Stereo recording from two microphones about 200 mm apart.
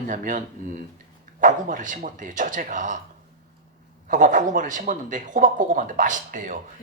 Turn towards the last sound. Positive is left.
turn(degrees=-40)  # may be behind; listen again after turning